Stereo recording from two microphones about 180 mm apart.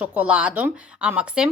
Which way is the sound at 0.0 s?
10° right (ahead or behind).